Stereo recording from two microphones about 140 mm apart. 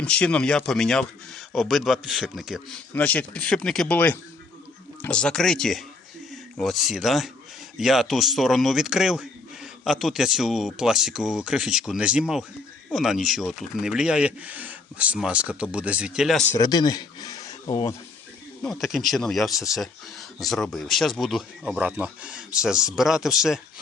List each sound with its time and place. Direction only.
0.0 s speech: 10° left (ahead or behind)
2.9 s speech: 10° left (ahead or behind)
16.6 s speech: 25° left (ahead or behind)
18.6 s speech: centre (ahead or behind)